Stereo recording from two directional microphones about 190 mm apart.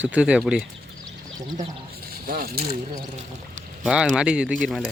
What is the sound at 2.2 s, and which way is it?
Speech, 50° right (ahead or behind).